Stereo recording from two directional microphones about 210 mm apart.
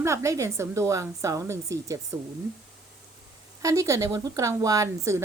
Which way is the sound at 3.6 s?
15° right (ahead or behind).